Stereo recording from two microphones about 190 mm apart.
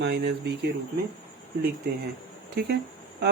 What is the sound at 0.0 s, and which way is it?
Speech, 65° right (ahead or behind).